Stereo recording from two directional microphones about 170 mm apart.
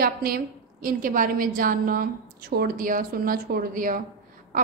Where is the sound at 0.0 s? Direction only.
60° right (ahead or behind).